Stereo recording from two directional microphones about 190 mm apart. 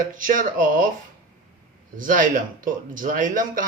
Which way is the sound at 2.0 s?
45° right (ahead or behind).